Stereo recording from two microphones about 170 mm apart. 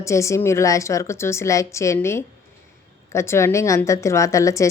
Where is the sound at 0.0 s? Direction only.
15° left (ahead or behind).